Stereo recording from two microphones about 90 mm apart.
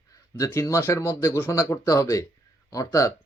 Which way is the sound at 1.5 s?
35° left (ahead or behind).